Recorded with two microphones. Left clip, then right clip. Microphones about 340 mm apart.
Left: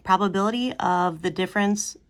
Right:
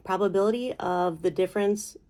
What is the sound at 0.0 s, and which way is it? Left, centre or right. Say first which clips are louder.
Speech: left 3 dB; left.